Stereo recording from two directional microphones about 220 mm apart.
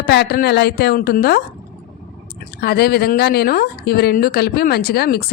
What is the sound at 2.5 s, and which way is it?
Speech, 45° left (ahead or behind).